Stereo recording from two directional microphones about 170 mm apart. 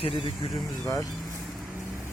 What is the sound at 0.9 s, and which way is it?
Speech, 20° left (ahead or behind).